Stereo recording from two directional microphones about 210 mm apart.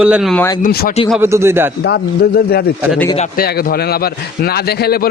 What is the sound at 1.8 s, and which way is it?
A man's voice, 50° left (ahead or behind).